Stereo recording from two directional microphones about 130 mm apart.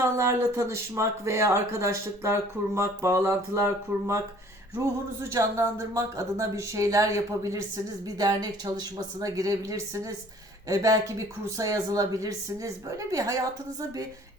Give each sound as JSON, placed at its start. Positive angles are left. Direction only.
{"t": 0.0, "sound": "speech", "side_deg": -20}
{"t": 5.3, "sound": "speech", "side_deg": -20}